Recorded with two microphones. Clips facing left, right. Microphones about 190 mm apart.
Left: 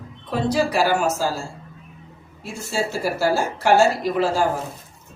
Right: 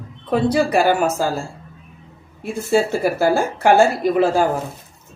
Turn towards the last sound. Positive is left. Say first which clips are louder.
# right 5 dB
turn(degrees=-55)  # may be behind; listen again after turning